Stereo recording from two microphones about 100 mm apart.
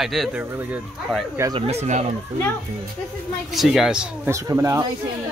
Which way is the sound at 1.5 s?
90° right.